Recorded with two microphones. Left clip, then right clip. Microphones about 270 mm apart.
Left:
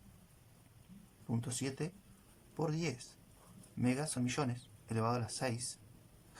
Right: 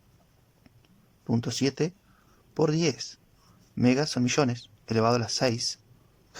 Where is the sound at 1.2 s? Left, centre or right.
Right.